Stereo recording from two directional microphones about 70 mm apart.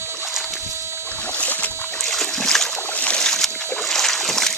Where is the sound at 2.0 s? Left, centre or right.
Centre.